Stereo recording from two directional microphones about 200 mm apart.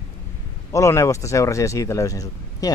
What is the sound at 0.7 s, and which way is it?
Speech, 15° left (ahead or behind).